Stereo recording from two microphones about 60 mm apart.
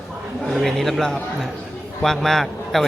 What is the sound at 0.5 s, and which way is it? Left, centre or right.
A man's voice, centre.